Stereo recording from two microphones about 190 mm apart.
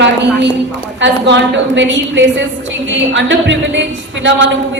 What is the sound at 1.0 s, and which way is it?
A woman's voice, 70° right (ahead or behind).